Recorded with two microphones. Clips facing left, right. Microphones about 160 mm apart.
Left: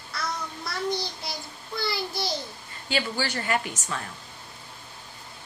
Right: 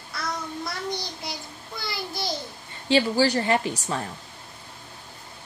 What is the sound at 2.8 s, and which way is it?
A woman's voice, 35° right (ahead or behind).